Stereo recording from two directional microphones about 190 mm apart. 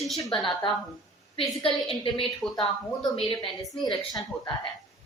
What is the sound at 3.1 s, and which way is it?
Speech, 30° left (ahead or behind).